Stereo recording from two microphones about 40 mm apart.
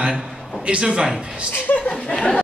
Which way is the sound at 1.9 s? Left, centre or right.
Centre.